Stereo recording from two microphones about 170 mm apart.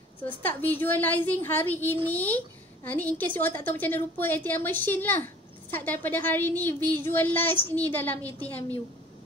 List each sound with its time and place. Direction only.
0.2 s a woman's voice: 10° left (ahead or behind)